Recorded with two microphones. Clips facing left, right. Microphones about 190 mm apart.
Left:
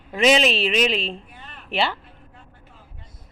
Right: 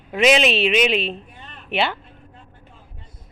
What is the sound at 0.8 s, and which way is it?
Speech, 30° left (ahead or behind).